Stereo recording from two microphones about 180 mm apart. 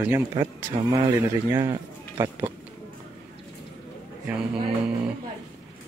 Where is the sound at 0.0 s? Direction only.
10° right (ahead or behind).